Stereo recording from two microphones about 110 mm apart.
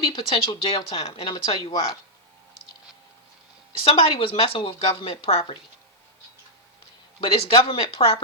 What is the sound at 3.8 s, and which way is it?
Speech, 55° left (ahead or behind).